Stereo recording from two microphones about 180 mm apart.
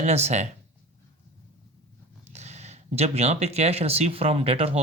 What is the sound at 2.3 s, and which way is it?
Speech, 40° right (ahead or behind).